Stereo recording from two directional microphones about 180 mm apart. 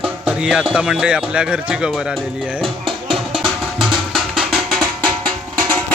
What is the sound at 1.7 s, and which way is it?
Music, 5° right (ahead or behind).